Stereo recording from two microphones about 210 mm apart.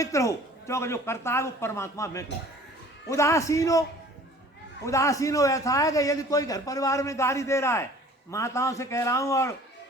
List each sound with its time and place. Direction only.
0.0 s a man's voice: 15° left (ahead or behind)
4.9 s a man's voice: 15° left (ahead or behind)